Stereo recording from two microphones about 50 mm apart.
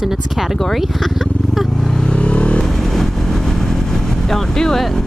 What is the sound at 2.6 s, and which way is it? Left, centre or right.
Vehicle, centre.